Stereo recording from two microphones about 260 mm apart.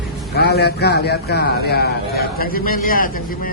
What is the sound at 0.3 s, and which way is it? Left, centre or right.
A man's voice, left.